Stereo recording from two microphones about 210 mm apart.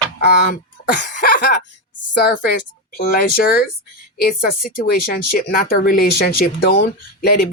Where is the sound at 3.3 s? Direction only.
45° left (ahead or behind).